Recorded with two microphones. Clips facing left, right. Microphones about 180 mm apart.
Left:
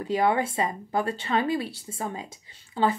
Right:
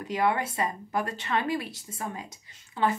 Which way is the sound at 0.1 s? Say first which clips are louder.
Left 3 dB; 25° left (ahead or behind).